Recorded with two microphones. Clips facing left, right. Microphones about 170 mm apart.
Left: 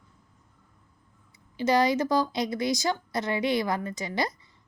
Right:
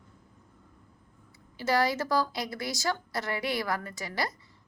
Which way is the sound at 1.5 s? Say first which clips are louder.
Left 4 dB; 20° left (ahead or behind).